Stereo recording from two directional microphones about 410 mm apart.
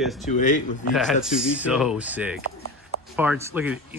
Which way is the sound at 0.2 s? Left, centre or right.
Centre.